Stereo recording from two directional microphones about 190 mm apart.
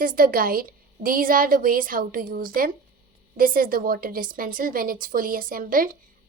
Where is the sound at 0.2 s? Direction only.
50° right (ahead or behind).